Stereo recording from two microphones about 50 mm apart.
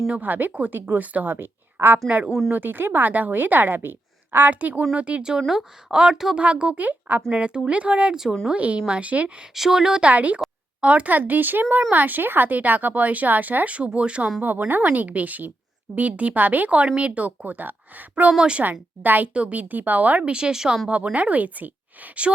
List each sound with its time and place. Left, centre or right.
0.1 s speech: right
1.3 s a woman's voice: right
2.0 s speech: right
2.5 s speech: right
4.9 s a woman's voice: right
6.3 s a woman's voice: right
9.6 s a woman's voice: centre
10.0 s a woman's voice: right
14.4 s speech: right
18.3 s a woman's voice: centre
18.6 s speech: right
20.2 s a woman's voice: centre
20.8 s a woman's voice: right